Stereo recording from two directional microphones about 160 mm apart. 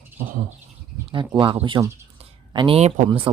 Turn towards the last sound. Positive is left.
turn(degrees=-45)  # may be behind; listen again after turning